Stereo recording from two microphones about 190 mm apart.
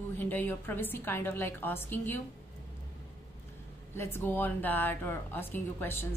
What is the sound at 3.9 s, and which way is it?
A woman's voice, 10° left (ahead or behind).